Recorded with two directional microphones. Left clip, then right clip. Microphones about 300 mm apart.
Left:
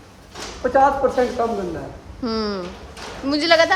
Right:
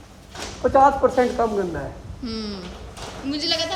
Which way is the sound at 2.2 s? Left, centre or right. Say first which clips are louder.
Left 8 dB; centre.